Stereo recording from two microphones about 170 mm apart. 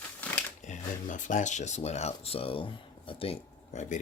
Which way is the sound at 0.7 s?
50° left (ahead or behind).